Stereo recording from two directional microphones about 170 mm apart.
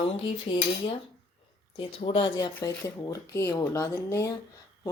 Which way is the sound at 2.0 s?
35° left (ahead or behind).